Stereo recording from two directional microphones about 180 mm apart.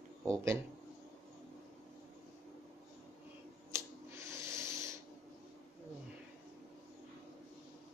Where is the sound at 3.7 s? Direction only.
15° right (ahead or behind).